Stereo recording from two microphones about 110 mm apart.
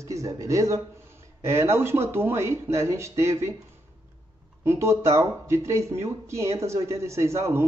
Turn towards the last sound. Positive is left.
turn(degrees=-25)  # may be behind; listen again after turning